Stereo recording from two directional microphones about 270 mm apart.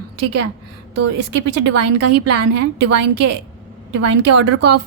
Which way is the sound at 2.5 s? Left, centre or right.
Right.